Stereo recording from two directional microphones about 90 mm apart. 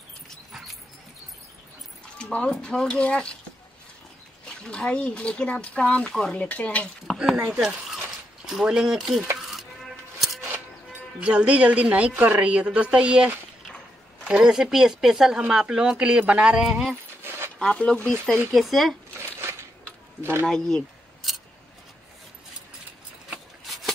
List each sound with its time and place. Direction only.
2.1 s speech: 10° left (ahead or behind)
4.5 s speech: 10° left (ahead or behind)
7.1 s a sound: centre (ahead or behind)
7.3 s speech: 5° right (ahead or behind)
9.4 s bleat: centre (ahead or behind)
11.1 s speech: 15° right (ahead or behind)
17.2 s a sound: 25° right (ahead or behind)
17.6 s speech: 10° left (ahead or behind)
18.5 s speech: centre (ahead or behind)
20.2 s speech: 25° right (ahead or behind)
20.4 s a sound: 5° left (ahead or behind)
23.6 s shuffling cards: centre (ahead or behind)